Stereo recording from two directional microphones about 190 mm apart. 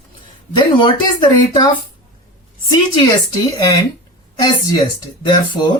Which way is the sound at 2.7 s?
20° left (ahead or behind).